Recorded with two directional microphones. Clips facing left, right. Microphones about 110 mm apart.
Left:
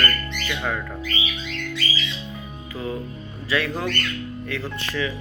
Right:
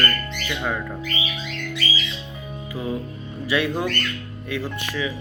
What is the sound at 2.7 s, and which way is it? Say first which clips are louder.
Speech: right 1 dB; 15° right (ahead or behind).